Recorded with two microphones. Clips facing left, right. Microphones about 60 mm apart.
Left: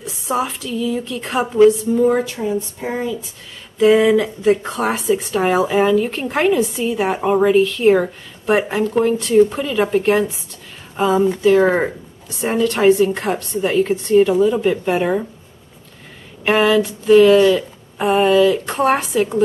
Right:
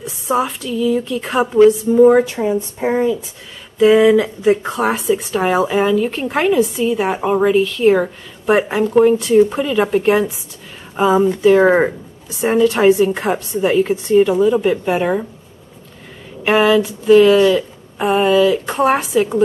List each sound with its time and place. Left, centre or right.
0.0 s speech: centre
2.1 s speech: right
3.7 s a woman's voice: centre
16.4 s speech: centre